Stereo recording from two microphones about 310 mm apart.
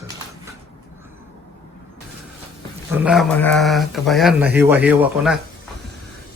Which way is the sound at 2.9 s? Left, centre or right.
Centre.